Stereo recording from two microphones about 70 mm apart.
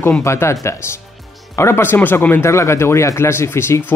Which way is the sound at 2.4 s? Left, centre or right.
Left.